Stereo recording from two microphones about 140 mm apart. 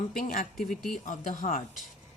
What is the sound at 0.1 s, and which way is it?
Speech, 75° left (ahead or behind).